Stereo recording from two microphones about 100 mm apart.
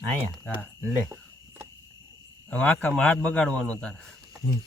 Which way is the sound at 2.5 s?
15° left (ahead or behind).